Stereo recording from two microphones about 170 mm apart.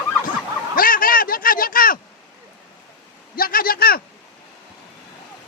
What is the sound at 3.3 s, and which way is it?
Speech, 60° left (ahead or behind).